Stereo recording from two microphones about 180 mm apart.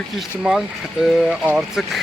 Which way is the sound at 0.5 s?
5° right (ahead or behind).